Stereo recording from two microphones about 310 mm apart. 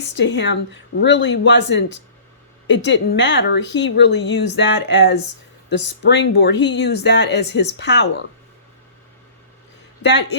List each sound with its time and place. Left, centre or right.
0.2 s speech: left
10.0 s speech: left